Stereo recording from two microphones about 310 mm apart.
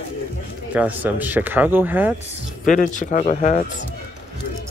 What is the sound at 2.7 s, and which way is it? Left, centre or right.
Speech, left.